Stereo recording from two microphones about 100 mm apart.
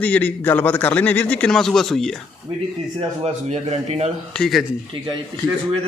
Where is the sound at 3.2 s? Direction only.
90° right.